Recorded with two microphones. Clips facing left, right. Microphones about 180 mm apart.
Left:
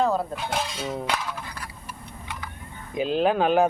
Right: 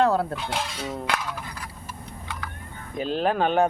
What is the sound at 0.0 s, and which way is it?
Cutlery, 70° right (ahead or behind).